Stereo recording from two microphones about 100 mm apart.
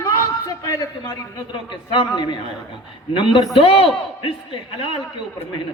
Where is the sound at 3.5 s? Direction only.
65° left (ahead or behind).